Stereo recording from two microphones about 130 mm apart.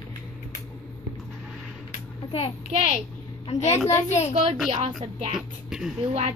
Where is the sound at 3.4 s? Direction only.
60° left (ahead or behind).